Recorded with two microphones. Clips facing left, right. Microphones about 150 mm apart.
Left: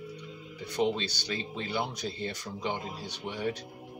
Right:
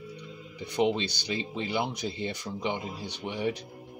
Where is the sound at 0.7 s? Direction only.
15° right (ahead or behind).